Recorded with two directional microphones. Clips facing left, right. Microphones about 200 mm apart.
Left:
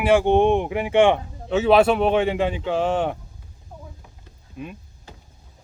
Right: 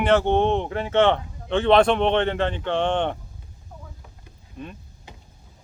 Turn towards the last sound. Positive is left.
turn(degrees=5)  # may be behind; listen again after turning